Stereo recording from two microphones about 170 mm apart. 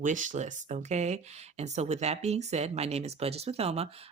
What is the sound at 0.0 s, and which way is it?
Speech, 50° right (ahead or behind).